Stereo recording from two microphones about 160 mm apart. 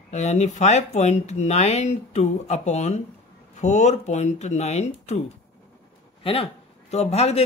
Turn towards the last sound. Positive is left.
turn(degrees=40)  # may be behind; listen again after turning